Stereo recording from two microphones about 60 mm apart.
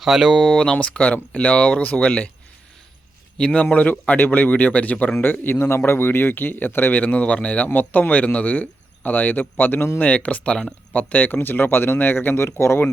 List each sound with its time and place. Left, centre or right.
0.0 s speech: centre
0.6 s a man's voice: centre
3.3 s speech: centre; by 7.0 s left
7.0 s a man's voice: left
10.9 s speech: left